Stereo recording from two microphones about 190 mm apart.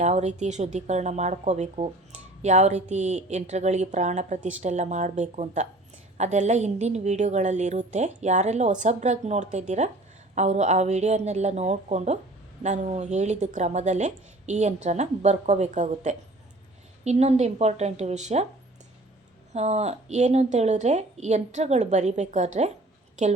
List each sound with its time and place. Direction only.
0.0 s speech: 35° right (ahead or behind)
19.5 s speech: 35° right (ahead or behind)